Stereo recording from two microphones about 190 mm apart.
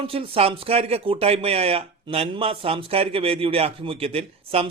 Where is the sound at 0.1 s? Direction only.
30° right (ahead or behind).